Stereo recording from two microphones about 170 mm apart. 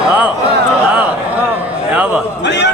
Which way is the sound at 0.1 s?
5° right (ahead or behind).